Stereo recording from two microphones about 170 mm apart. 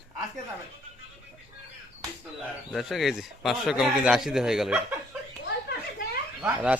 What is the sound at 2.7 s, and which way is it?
Speech, centre (ahead or behind).